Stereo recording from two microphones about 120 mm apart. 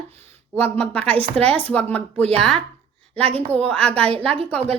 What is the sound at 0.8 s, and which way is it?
A woman's voice, 10° left (ahead or behind).